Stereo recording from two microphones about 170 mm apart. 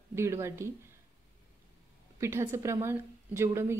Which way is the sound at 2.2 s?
15° right (ahead or behind).